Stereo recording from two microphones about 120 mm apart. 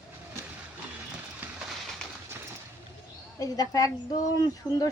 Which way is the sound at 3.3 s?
30° left (ahead or behind).